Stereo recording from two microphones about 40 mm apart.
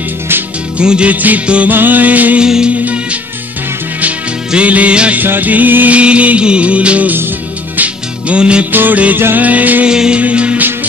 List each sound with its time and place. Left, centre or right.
0.7 s music: right
1.1 s music: right
2.4 s music: centre
2.8 s music: right
4.6 s music: right
5.2 s music: right
5.9 s music: right
8.3 s music: right
8.7 s music: right
9.4 s music: right
9.8 s music: centre
10.2 s music: right